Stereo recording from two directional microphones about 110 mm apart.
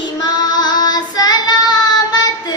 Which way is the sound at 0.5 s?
35° left (ahead or behind).